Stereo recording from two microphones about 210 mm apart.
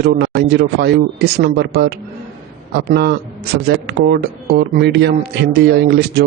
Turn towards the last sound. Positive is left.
turn(degrees=-50)  # may be behind; listen again after turning